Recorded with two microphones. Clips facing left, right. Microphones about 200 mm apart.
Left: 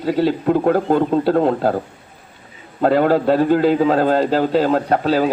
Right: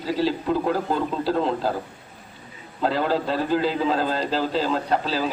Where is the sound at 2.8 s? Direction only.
55° left (ahead or behind).